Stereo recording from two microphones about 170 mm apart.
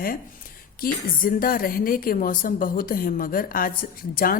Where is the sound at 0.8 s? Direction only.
60° left (ahead or behind).